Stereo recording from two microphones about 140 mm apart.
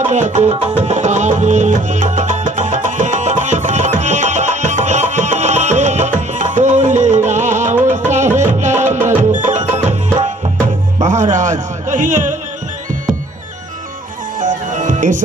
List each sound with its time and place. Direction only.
0.0 s music: 55° right (ahead or behind)
9.9 s tabla: 55° right (ahead or behind)
11.0 s music: 60° right (ahead or behind)
14.3 s music: 65° right (ahead or behind)